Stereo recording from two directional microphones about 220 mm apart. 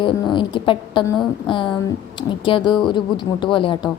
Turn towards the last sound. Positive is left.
turn(degrees=20)  # may be behind; listen again after turning